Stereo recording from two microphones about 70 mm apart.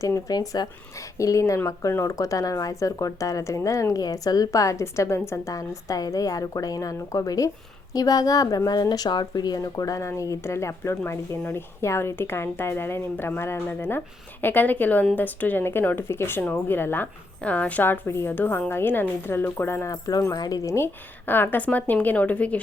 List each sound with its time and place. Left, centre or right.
0.0 s speech: left
0.3 s speech: left
0.9 s speech: left
9.6 s speech: left
10.1 s speech: left
17.4 s speech: left
18.0 s speech: left
19.9 s speech: left
20.7 s speech: left